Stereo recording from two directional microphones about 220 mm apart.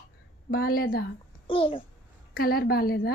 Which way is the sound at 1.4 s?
25° left (ahead or behind).